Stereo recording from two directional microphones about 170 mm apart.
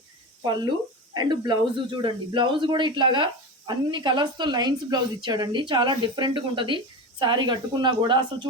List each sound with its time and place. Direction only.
1.1 s a woman's voice: 25° right (ahead or behind)